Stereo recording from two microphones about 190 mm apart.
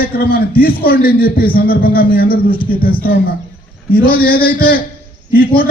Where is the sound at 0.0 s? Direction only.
50° left (ahead or behind).